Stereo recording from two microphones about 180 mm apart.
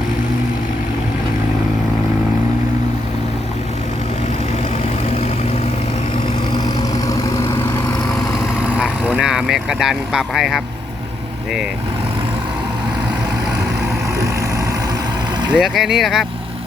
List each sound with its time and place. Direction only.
5.0 s vehicle: 35° left (ahead or behind)
6.5 s vehicle: 20° left (ahead or behind)
8.6 s vehicle: 5° right (ahead or behind)
15.5 s speech: centre (ahead or behind)